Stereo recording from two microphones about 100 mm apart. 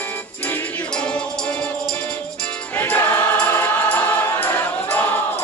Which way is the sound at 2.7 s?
25° left (ahead or behind).